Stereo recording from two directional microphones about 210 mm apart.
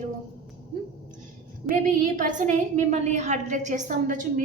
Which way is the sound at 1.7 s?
40° right (ahead or behind).